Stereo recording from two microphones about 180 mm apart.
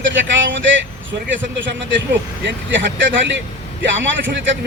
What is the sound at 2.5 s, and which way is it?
A man's voice, 90° right.